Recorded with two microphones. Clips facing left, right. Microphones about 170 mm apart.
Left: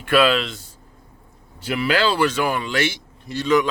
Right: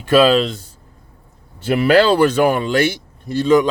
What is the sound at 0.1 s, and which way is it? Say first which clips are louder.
Speech: right 5 dB; 40° right (ahead or behind).